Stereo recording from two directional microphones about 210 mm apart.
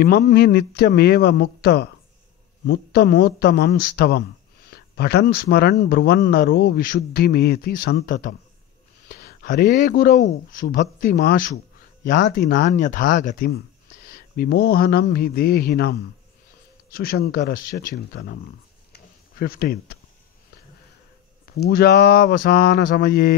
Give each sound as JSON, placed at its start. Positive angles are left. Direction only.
{"t": 0.3, "sound": "speech", "side_deg": 50}
{"t": 18.9, "sound": "a sound", "side_deg": 50}
{"t": 21.5, "sound": "speech", "side_deg": 50}